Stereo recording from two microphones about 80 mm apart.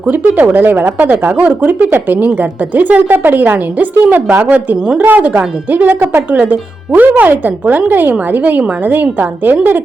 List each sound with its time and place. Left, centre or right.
0.0 s speech: right